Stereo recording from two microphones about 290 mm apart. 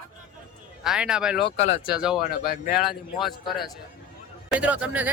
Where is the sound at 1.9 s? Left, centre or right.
Centre.